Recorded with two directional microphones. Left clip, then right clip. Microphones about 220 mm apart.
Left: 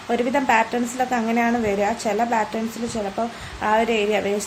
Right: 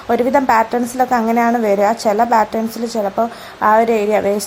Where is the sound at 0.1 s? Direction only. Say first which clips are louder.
Right 6 dB; 20° right (ahead or behind).